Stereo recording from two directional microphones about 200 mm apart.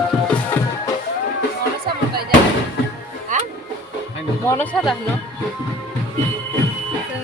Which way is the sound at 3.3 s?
40° right (ahead or behind).